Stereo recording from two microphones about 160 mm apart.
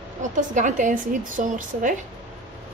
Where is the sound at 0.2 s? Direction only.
50° right (ahead or behind).